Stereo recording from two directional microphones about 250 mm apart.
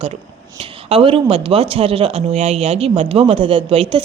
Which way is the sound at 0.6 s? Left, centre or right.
Right.